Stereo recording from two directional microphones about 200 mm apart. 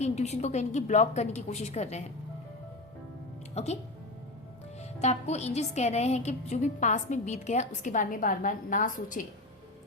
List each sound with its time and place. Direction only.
0.0 s a woman's voice: 35° left (ahead or behind)
3.5 s speech: 35° left (ahead or behind)
4.8 s a woman's voice: 35° left (ahead or behind)